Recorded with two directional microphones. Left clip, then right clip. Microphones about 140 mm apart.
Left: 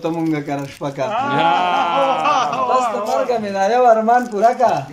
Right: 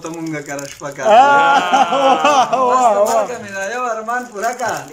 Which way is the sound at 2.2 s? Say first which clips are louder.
Right 4 dB; 75° right (ahead or behind).